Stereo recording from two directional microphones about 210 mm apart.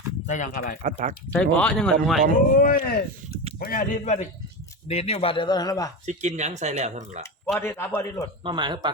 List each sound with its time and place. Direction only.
0.3 s speech: 35° left (ahead or behind)
0.8 s speech: 35° right (ahead or behind)
1.3 s speech: 5° left (ahead or behind)
2.6 s a man's voice: 45° left (ahead or behind); by 5.9 s 15° left (ahead or behind)
6.1 s speech: 35° right (ahead or behind)
7.6 s a man's voice: 10° left (ahead or behind)
8.4 s speech: 20° right (ahead or behind)